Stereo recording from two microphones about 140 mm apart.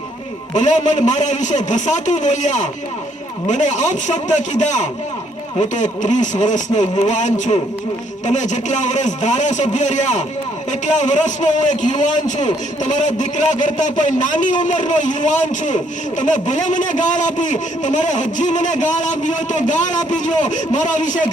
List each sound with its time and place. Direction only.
0.5 s a man's voice: 55° left (ahead or behind)